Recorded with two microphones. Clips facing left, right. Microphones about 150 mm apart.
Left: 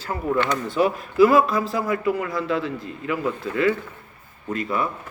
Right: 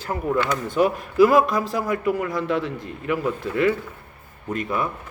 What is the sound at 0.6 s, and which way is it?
A man's voice, 45° right (ahead or behind).